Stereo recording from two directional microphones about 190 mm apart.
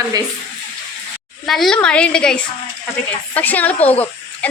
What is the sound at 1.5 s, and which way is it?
A woman's voice, centre (ahead or behind).